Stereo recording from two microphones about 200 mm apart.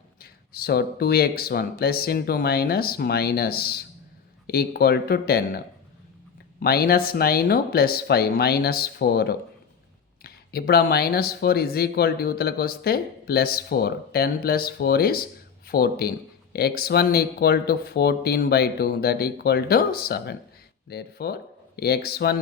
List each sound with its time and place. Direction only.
0.2 s speech: 50° left (ahead or behind)
6.6 s speech: 50° left (ahead or behind)